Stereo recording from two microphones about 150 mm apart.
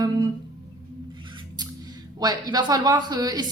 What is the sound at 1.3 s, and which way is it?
Speech, 25° right (ahead or behind).